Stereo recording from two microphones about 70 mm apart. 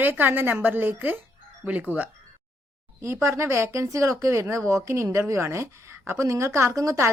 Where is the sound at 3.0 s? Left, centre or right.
Right.